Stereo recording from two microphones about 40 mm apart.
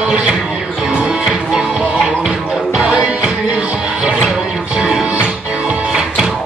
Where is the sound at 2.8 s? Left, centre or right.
Right.